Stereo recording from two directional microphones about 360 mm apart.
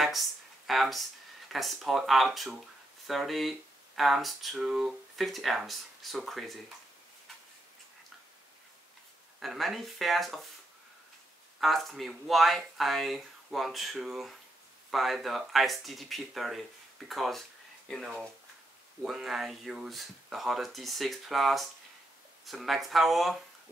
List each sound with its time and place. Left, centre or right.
0.7 s speech: centre
9.4 s speech: centre
11.6 s speech: centre